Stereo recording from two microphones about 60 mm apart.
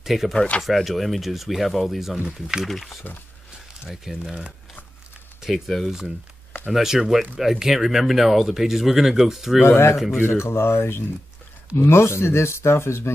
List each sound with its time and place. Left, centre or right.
0.0 s speech: centre
5.4 s speech: centre
9.7 s speech: left
9.9 s speech: centre
10.2 s speech: left